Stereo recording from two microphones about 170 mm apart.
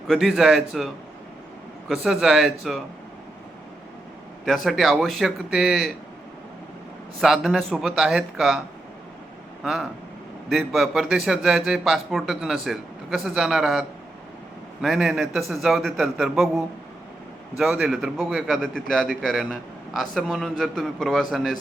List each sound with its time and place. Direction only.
0.1 s a man's voice: centre (ahead or behind)
1.9 s a man's voice: 5° right (ahead or behind)
4.4 s a man's voice: centre (ahead or behind)
7.2 s a man's voice: centre (ahead or behind)
10.5 s a man's voice: centre (ahead or behind)